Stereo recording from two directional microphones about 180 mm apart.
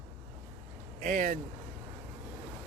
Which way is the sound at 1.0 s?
50° right (ahead or behind).